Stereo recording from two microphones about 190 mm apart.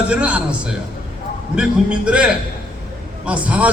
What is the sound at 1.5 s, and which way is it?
A man's voice, 5° right (ahead or behind).